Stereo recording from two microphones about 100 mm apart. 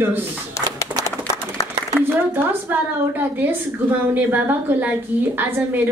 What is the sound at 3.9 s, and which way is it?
A woman's voice, 20° right (ahead or behind).